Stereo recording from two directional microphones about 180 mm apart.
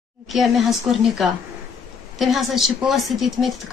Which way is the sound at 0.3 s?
Centre (ahead or behind).